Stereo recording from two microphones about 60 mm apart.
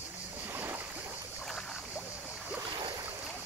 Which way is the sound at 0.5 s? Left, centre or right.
Right.